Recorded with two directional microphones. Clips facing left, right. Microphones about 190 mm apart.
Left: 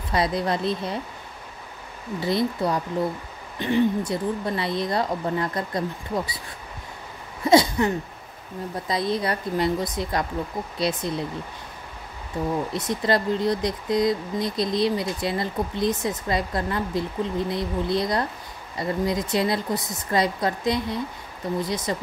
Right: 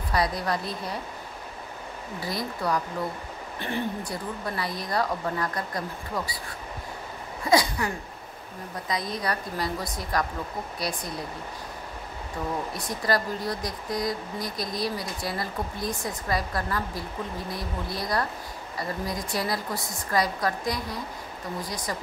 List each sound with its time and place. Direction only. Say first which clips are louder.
0.1 s speech: left 3 dB; 25° left (ahead or behind)
2.1 s speech: left 9 dB; 25° left (ahead or behind)
7.4 s a sound: left 6 dB; 25° left (ahead or behind)
8.8 s speech: left 5 dB; 30° left (ahead or behind)
12.7 s speech: left 3 dB; 25° left (ahead or behind)